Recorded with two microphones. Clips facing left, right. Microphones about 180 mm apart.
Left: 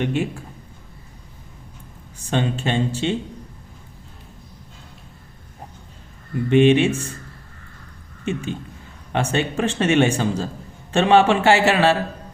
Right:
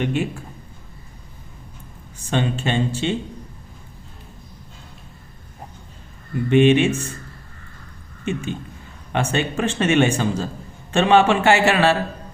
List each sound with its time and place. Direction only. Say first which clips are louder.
0.0 s speech: even; 35° left (ahead or behind)
2.3 s speech: even; 35° left (ahead or behind)
6.5 s speech: even; 35° left (ahead or behind)
8.2 s speech: even; 35° left (ahead or behind)